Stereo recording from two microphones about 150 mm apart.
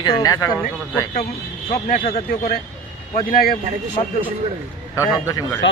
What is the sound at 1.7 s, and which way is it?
Speech, 65° left (ahead or behind).